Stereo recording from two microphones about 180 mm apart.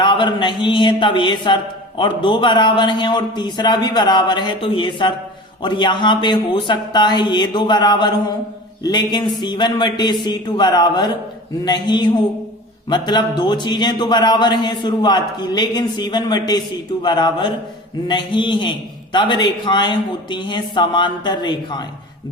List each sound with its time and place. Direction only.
0.0 s speech: 25° left (ahead or behind)